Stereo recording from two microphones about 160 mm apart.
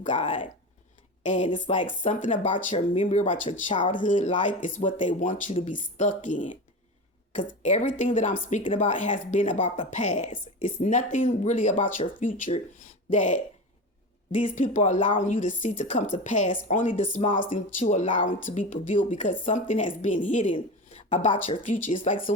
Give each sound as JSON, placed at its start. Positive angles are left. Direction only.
{"t": 0.0, "sound": "a woman's voice", "side_deg": 50}
{"t": 3.7, "sound": "speech", "side_deg": 30}
{"t": 3.9, "sound": "speech", "side_deg": 50}